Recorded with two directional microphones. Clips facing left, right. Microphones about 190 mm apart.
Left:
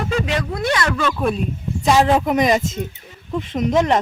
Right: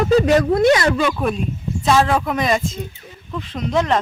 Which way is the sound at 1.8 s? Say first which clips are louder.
Left 1 dB; 15° left (ahead or behind).